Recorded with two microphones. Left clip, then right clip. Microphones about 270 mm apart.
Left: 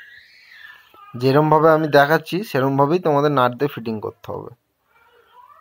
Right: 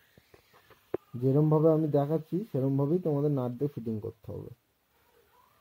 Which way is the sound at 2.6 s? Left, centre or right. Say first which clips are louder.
Left 13 dB; left.